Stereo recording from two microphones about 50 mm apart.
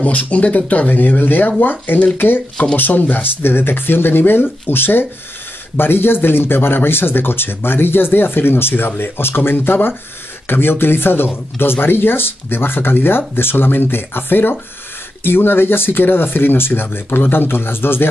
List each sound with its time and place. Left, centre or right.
0.0 s speech: left